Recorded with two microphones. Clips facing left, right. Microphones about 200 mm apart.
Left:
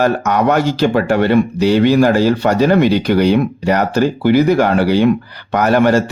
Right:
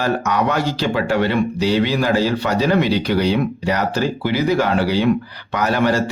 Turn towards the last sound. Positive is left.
turn(degrees=50)  # may be behind; listen again after turning